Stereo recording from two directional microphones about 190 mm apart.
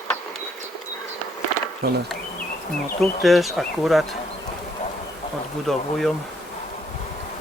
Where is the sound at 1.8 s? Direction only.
55° right (ahead or behind).